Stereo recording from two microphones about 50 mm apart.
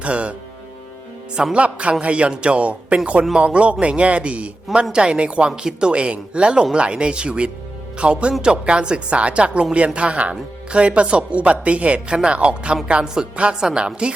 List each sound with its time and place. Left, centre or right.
0.0 s speech: right
1.5 s speech: right